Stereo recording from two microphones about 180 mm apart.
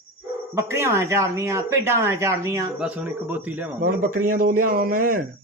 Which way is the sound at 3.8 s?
50° right (ahead or behind).